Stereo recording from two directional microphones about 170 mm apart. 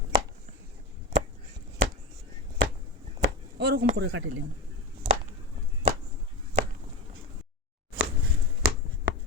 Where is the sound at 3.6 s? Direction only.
70° right (ahead or behind).